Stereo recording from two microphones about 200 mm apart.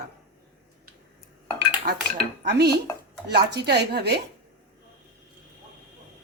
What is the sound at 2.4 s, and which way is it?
Speech, 55° right (ahead or behind).